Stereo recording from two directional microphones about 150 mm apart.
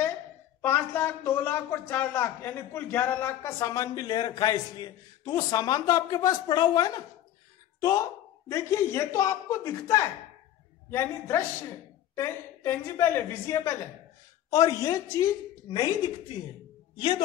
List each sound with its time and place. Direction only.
0.6 s speech: 15° left (ahead or behind)
8.5 s a woman's voice: 20° left (ahead or behind)